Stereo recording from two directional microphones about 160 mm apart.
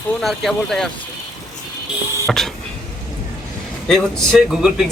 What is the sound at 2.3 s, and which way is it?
Vehicle, centre (ahead or behind).